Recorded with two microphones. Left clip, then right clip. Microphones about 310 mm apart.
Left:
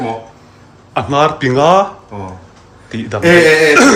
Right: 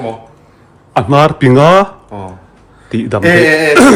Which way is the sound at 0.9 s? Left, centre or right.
Centre.